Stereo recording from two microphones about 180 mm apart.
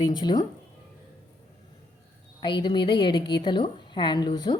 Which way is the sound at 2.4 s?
25° left (ahead or behind).